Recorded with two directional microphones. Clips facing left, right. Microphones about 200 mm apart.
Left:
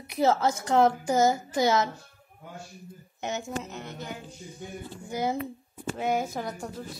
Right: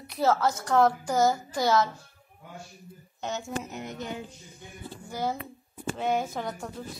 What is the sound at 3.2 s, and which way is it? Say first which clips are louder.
Speech: left 1 dB; 15° left (ahead or behind).